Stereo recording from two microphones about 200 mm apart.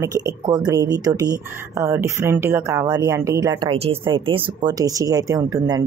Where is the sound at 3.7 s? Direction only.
30° right (ahead or behind).